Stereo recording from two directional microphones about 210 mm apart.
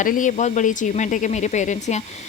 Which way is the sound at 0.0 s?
40° left (ahead or behind).